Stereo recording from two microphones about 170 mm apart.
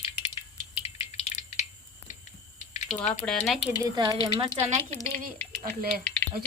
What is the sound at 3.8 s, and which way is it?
Speech, 25° right (ahead or behind).